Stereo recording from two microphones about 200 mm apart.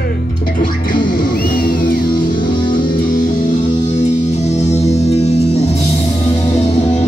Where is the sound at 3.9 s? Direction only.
35° left (ahead or behind).